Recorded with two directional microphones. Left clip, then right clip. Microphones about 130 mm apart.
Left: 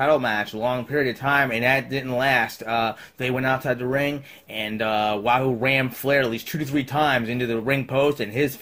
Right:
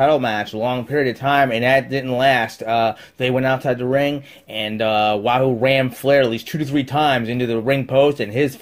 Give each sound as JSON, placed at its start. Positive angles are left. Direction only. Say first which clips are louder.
{"t": 0.0, "sound": "speech", "louder": "right 4 dB", "side_deg": -35}